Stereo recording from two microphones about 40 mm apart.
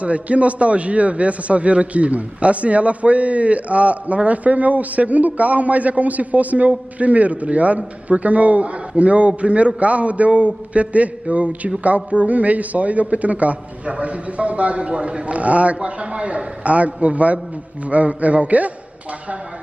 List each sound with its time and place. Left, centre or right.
0.0 s a man's voice: right